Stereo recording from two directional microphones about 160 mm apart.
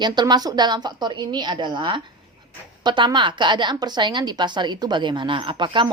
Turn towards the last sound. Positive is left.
turn(degrees=-30)  # may be behind; listen again after turning